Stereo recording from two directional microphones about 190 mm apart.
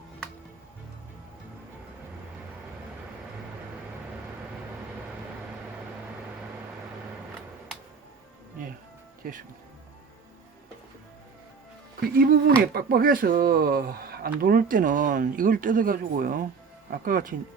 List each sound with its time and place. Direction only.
12.1 s speech: 55° right (ahead or behind)